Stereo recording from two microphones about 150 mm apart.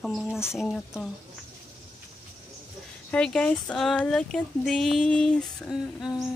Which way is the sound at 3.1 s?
5° left (ahead or behind).